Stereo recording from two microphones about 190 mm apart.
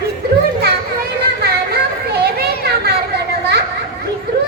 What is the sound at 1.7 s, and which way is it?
Children playing, 55° right (ahead or behind).